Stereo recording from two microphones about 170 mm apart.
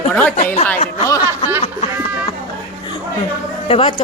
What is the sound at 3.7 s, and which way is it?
Speech, 30° left (ahead or behind).